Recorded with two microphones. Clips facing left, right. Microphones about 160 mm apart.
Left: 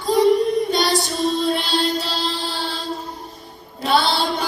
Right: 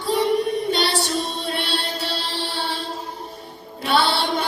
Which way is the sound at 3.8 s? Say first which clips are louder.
Left 1 dB; 40° left (ahead or behind).